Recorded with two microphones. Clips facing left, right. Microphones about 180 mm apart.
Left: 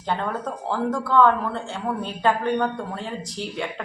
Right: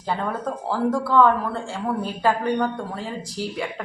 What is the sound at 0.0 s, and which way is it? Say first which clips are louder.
Speech: right 1 dB; 5° right (ahead or behind).